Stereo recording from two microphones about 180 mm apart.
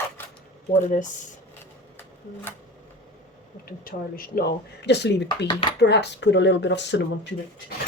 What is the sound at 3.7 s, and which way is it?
Speech, 55° left (ahead or behind).